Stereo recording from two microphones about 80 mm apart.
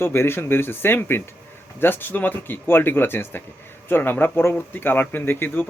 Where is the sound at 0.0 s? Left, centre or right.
Left.